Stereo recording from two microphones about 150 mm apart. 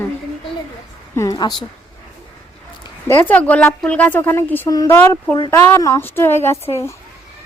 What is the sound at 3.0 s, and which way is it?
A woman's voice, 15° left (ahead or behind).